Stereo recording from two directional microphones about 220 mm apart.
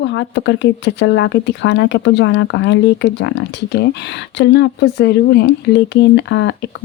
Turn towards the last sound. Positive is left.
turn(degrees=55)  # may be behind; listen again after turning